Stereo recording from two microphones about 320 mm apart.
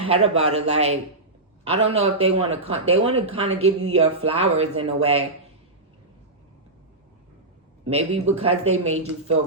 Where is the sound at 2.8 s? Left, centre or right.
Centre.